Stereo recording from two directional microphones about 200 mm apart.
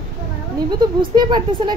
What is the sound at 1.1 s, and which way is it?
Speech, 20° right (ahead or behind).